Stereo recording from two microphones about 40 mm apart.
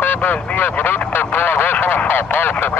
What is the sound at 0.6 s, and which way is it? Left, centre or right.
Speech, left.